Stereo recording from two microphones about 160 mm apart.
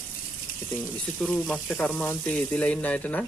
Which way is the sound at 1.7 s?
Centre (ahead or behind).